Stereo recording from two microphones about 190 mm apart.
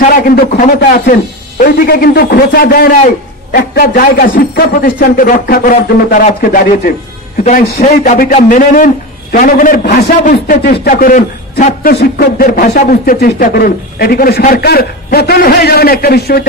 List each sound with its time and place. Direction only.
0.0 s a man's voice: 50° left (ahead or behind)
10.9 s a man's voice: 45° left (ahead or behind)
12.4 s a man's voice: 45° left (ahead or behind)